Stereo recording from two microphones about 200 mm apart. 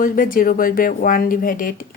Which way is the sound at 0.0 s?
45° left (ahead or behind).